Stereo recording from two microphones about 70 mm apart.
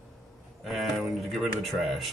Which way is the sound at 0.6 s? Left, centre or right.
Centre.